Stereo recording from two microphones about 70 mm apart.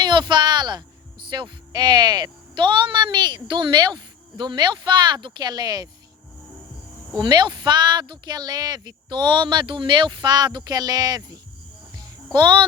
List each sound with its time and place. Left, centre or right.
0.0 s a sound: right
1.3 s speech: right
7.2 s speech: right
11.9 s music: right